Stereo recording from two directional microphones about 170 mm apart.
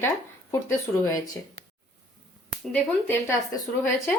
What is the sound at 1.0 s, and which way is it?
Speech, 20° left (ahead or behind).